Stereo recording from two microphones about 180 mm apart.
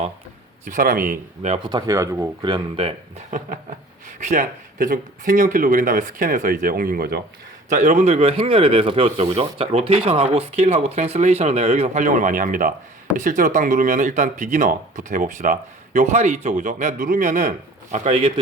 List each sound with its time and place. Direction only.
0.6 s speech: 45° right (ahead or behind)
1.5 s speech: 25° right (ahead or behind); by 7.2 s 55° right (ahead or behind)
7.7 s speech: 45° right (ahead or behind)